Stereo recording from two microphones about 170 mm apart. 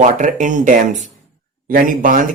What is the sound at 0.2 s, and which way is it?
Speech, 50° right (ahead or behind).